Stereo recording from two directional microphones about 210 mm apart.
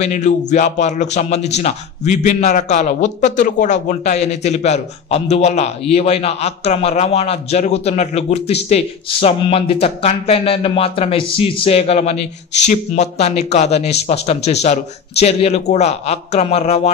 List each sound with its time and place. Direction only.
0.0 s a man's voice: 35° left (ahead or behind)